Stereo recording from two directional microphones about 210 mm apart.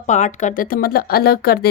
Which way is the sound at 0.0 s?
35° left (ahead or behind).